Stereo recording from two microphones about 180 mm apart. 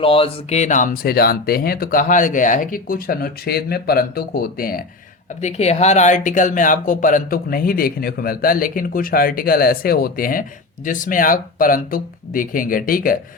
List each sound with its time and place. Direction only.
0.0 s speech: 30° left (ahead or behind); by 4.8 s 55° left (ahead or behind)
5.4 s speech: 40° left (ahead or behind)